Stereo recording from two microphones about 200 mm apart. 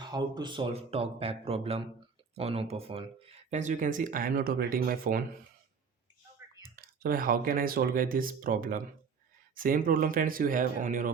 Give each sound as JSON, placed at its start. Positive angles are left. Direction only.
{"t": 0.0, "sound": "speech", "side_deg": -20}
{"t": 6.7, "sound": "speech", "side_deg": -45}